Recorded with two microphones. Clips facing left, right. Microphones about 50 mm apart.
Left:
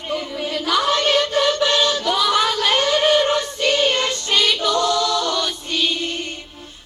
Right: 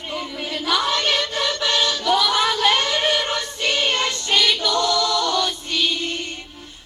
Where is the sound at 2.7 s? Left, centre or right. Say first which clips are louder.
Left 1 dB; left.